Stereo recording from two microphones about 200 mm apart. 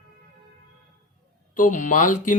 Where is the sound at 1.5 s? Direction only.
40° left (ahead or behind).